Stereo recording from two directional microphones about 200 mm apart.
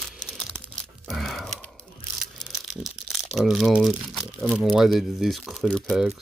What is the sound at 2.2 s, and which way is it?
Speech, centre (ahead or behind).